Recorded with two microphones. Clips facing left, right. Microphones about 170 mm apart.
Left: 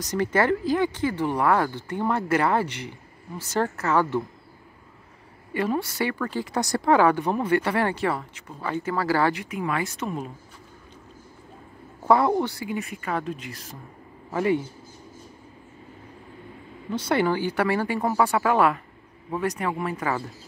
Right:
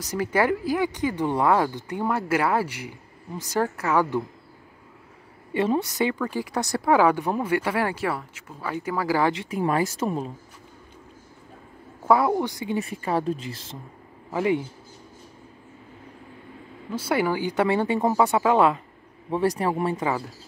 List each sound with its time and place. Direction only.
0.0 s speech: 5° right (ahead or behind)
5.5 s speech: 20° right (ahead or behind)
6.5 s speech: centre (ahead or behind); by 9.5 s 20° right (ahead or behind)
9.5 s speech: 40° right (ahead or behind)
12.1 s speech: 5° right (ahead or behind)
12.6 s speech: 35° right (ahead or behind)
14.3 s a man's voice: 15° right (ahead or behind)
16.9 s speech: 10° right (ahead or behind)
19.3 s speech: 30° right (ahead or behind)